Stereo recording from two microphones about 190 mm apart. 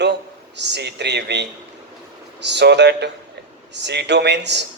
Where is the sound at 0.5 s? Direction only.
65° right (ahead or behind).